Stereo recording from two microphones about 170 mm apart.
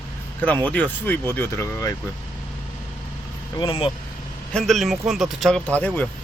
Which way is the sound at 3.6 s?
30° left (ahead or behind).